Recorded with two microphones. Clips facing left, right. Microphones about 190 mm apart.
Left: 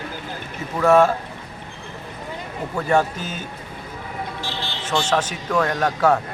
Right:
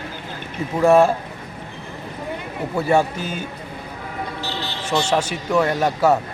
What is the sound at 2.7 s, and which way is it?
Speech, 10° right (ahead or behind).